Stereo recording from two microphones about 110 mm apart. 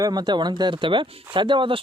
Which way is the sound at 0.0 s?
40° right (ahead or behind).